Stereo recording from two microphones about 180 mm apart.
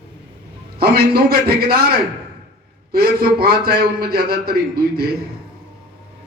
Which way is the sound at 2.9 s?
60° right (ahead or behind).